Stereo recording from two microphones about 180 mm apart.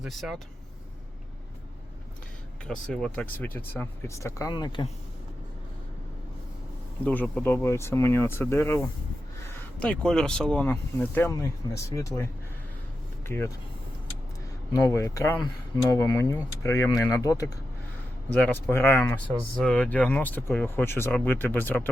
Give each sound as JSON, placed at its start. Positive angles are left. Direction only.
{"t": 0.0, "sound": "speech", "side_deg": 0}
{"t": 2.6, "sound": "speech", "side_deg": 5}
{"t": 7.0, "sound": "speech", "side_deg": 10}
{"t": 14.8, "sound": "speech", "side_deg": 15}